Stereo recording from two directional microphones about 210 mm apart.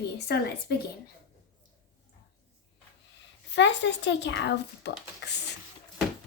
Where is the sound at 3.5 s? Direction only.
55° left (ahead or behind).